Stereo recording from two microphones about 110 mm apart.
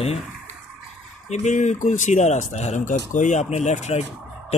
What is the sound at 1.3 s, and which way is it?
Speech, 90° left.